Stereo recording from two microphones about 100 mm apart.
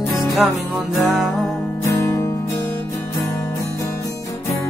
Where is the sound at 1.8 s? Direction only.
30° left (ahead or behind).